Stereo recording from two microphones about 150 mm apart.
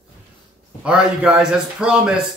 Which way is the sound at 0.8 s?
5° right (ahead or behind).